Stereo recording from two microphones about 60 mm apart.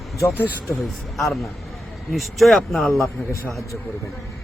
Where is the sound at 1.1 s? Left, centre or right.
Centre.